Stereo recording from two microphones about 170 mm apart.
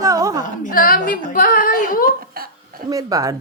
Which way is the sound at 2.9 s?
20° right (ahead or behind).